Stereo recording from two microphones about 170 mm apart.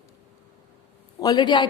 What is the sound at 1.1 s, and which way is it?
Speech, 25° left (ahead or behind).